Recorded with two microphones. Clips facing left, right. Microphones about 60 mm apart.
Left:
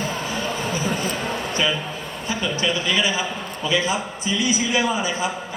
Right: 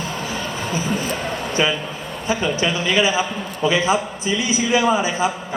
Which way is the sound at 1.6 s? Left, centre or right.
Right.